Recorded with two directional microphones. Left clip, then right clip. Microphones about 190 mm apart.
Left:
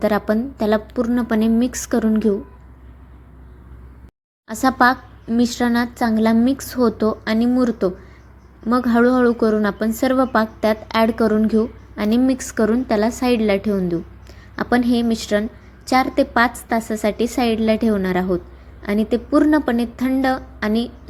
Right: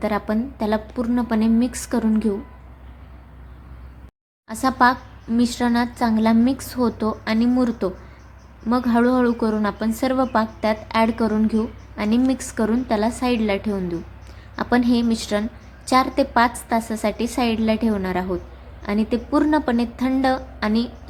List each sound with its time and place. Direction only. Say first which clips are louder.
0.0 s a woman's voice: left 4 dB; 20° left (ahead or behind)
4.4 s a woman's voice: left 2 dB; 20° left (ahead or behind)